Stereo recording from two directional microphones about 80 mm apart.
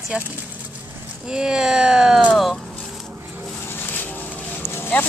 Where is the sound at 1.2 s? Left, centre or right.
Centre.